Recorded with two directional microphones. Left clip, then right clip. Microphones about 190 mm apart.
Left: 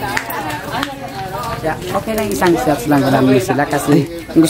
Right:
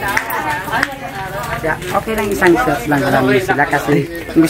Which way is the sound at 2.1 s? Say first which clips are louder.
Right 2 dB; 50° left (ahead or behind).